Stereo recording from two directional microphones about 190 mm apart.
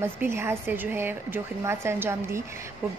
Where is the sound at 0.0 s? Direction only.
15° right (ahead or behind).